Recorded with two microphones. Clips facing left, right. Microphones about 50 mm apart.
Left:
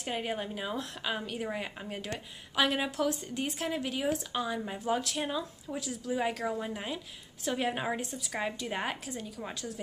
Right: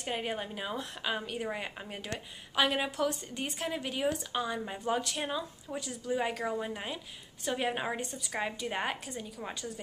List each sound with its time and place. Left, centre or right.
0.0 s speech: centre